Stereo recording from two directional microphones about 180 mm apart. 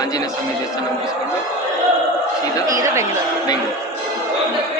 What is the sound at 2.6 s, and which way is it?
Speech, 20° right (ahead or behind).